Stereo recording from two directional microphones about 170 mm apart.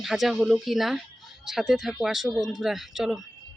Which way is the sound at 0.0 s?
Centre (ahead or behind).